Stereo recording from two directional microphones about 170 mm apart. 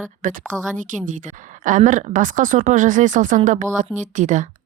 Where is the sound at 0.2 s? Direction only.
50° right (ahead or behind).